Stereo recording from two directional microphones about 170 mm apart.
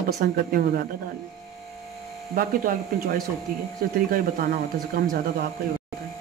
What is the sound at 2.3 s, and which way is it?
Speech, 60° right (ahead or behind).